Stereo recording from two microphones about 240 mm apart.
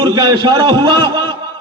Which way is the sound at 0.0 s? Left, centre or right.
Centre.